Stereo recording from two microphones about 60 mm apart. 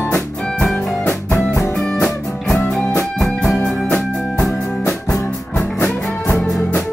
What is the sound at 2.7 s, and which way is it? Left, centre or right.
Music, centre.